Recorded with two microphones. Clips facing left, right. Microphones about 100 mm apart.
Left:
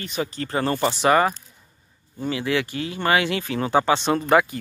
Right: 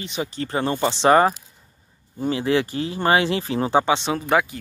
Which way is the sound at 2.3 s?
30° right (ahead or behind).